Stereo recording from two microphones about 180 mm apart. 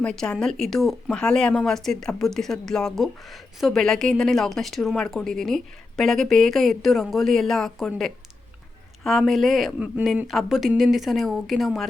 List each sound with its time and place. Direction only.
0.0 s speech: 5° left (ahead or behind)